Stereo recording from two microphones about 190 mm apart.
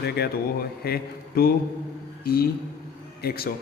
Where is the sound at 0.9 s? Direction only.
55° left (ahead or behind).